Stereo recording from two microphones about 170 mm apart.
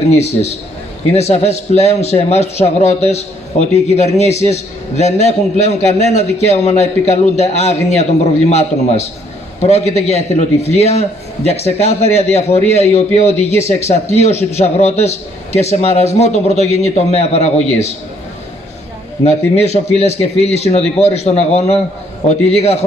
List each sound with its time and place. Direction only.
0.2 s a man's voice: 40° left (ahead or behind)
19.2 s a man's voice: 40° left (ahead or behind)